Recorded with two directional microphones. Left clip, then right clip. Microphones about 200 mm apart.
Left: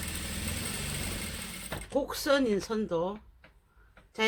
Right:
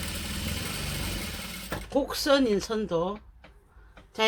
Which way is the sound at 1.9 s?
5° left (ahead or behind).